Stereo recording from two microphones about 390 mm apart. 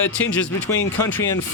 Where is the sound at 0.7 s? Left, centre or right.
Centre.